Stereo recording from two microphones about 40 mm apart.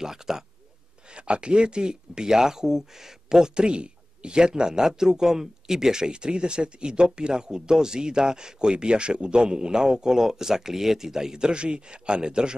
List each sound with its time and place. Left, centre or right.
0.0 s speech: centre
1.1 s speech: right